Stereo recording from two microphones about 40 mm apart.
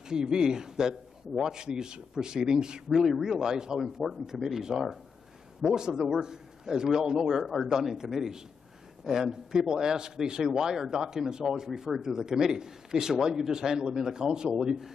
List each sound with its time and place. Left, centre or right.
0.1 s a man's voice: centre